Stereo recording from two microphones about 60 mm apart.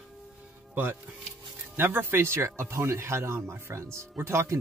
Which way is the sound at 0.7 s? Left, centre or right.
Right.